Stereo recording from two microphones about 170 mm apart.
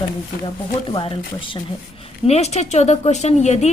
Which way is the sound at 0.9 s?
30° left (ahead or behind).